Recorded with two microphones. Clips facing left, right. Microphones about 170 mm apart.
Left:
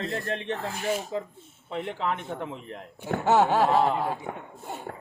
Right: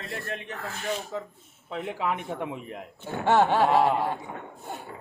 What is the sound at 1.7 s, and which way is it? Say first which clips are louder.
A man's voice: even; 5° right (ahead or behind).